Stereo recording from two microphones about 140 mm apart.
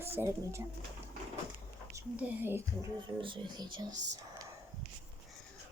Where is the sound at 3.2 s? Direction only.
35° right (ahead or behind).